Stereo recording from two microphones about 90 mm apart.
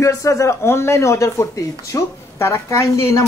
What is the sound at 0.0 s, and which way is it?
Speech, 35° left (ahead or behind).